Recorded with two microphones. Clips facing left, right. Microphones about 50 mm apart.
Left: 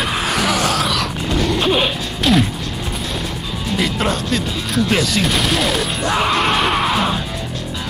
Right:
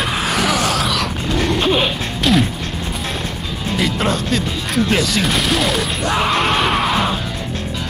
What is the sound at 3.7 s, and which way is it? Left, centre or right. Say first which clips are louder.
Music: right 1 dB; centre.